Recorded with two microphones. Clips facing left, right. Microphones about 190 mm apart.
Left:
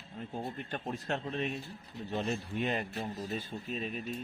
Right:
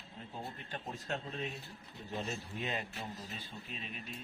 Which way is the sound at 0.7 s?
60° left (ahead or behind).